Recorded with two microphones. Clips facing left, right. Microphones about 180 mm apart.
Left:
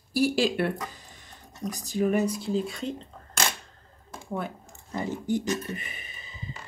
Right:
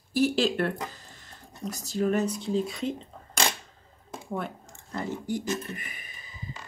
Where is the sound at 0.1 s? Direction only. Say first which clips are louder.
Even; 10° left (ahead or behind).